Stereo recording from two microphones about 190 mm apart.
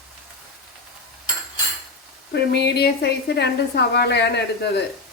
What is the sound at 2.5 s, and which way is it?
A woman's voice, 60° left (ahead or behind).